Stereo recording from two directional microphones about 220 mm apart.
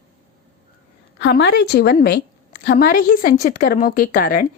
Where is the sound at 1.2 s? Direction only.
45° left (ahead or behind).